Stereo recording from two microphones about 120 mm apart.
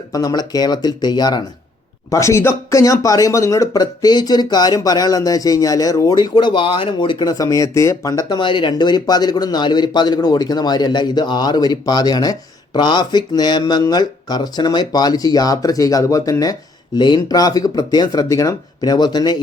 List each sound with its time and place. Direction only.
0.1 s speech: 30° left (ahead or behind)
2.0 s speech: 25° left (ahead or behind)